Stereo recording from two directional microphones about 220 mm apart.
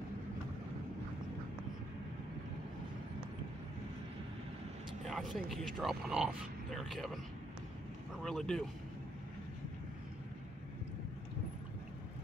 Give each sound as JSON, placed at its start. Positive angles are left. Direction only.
{"t": 5.0, "sound": "speech", "side_deg": 0}
{"t": 8.2, "sound": "speech", "side_deg": 0}